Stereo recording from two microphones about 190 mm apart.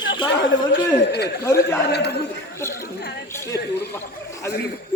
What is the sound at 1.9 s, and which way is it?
Speech, 60° left (ahead or behind).